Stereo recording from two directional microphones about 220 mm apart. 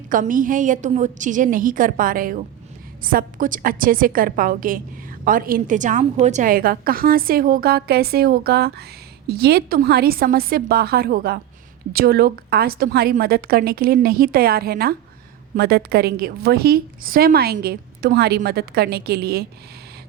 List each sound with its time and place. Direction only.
0.1 s a woman's voice: 35° right (ahead or behind)